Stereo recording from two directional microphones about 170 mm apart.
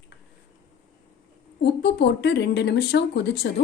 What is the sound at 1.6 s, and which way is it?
Speech, 75° left (ahead or behind).